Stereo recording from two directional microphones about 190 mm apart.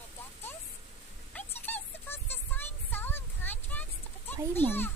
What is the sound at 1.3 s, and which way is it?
Music, 10° left (ahead or behind).